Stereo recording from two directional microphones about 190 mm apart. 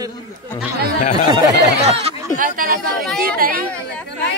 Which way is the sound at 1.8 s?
40° right (ahead or behind).